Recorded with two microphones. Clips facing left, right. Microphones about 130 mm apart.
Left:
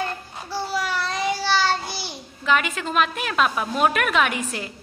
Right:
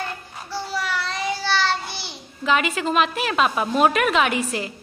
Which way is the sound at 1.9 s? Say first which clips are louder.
Left 2 dB; 10° left (ahead or behind).